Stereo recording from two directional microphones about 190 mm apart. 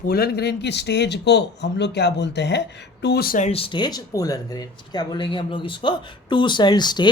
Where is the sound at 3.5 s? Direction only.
30° left (ahead or behind).